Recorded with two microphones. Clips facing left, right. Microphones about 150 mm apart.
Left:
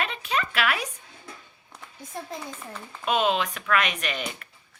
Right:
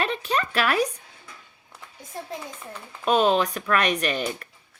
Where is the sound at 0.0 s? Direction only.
35° right (ahead or behind).